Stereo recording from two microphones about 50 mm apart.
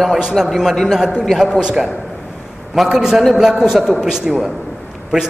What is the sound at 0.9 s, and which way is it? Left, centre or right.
A man's voice, centre.